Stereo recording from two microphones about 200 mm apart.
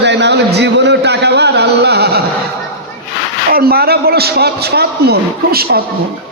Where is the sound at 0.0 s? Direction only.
60° right (ahead or behind).